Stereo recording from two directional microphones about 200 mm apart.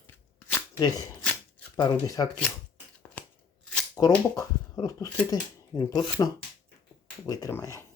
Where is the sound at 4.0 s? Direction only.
20° left (ahead or behind).